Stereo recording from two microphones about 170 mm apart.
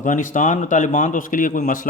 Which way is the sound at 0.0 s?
50° left (ahead or behind).